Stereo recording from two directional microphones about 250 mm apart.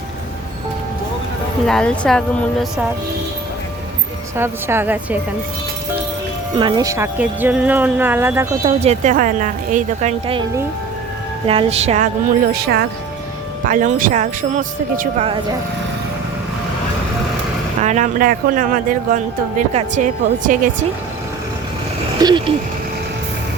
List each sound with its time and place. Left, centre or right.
1.6 s speech: centre
4.4 s speech: centre
6.6 s speech: centre
8.6 s a woman's voice: right
12.5 s a woman's voice: right
17.8 s speech: right
22.2 s speech: centre